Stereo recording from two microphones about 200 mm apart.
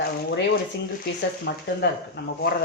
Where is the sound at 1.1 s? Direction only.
55° left (ahead or behind).